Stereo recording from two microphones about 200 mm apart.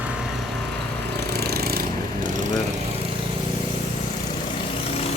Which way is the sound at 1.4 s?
50° right (ahead or behind).